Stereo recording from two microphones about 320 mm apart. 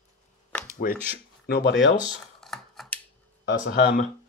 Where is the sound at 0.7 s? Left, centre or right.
Left.